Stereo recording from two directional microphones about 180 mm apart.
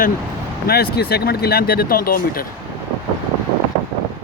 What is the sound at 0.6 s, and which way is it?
Speech, 60° left (ahead or behind).